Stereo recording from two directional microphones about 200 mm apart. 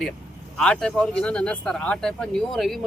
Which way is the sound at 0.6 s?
5° left (ahead or behind).